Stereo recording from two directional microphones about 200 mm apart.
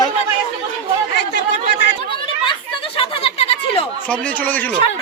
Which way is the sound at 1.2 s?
60° left (ahead or behind).